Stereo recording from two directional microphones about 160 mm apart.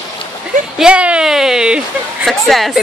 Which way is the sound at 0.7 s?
5° right (ahead or behind).